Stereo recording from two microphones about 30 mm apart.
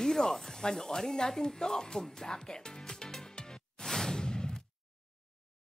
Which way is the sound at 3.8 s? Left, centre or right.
Centre.